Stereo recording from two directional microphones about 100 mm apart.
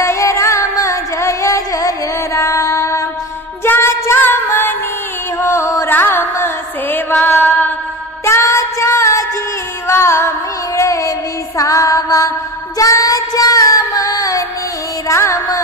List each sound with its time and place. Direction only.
0.0 s music: 30° left (ahead or behind)
12.7 s child singing: 35° left (ahead or behind)
15.0 s music: 30° left (ahead or behind)